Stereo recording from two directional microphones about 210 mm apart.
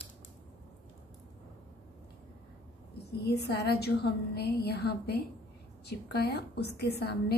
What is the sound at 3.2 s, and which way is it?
A woman's voice, 50° left (ahead or behind).